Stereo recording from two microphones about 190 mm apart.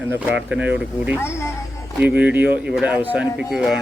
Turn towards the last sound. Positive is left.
turn(degrees=0)  # may be behind; listen again after turning